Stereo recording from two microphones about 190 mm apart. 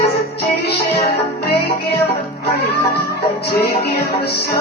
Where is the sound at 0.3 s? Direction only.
60° left (ahead or behind).